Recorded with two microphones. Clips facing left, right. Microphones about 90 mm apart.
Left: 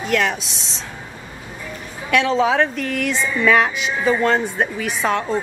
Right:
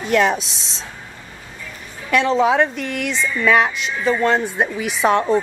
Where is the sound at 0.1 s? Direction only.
30° right (ahead or behind).